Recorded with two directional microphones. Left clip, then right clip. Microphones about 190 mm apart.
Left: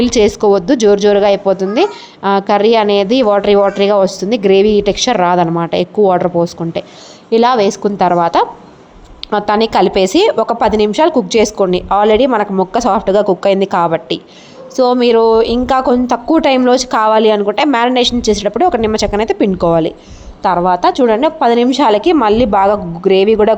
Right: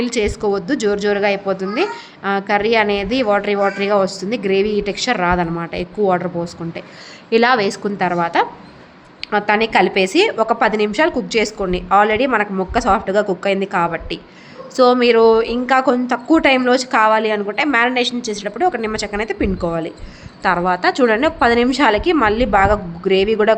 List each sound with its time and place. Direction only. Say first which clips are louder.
0.0 s a woman's voice: left 8 dB; 30° left (ahead or behind)
7.3 s a woman's voice: left 4 dB; 15° left (ahead or behind); by 14.2 s 30° left (ahead or behind)
14.8 s a woman's voice: left 2 dB; 20° left (ahead or behind)
20.4 s a woman's voice: left 5 dB; 15° left (ahead or behind)